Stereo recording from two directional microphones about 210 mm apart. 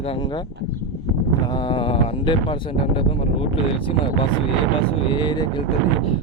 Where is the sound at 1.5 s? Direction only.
25° left (ahead or behind).